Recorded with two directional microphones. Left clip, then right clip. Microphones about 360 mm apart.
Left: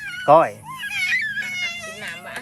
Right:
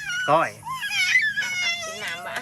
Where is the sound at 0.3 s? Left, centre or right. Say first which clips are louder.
Left 7 dB; centre.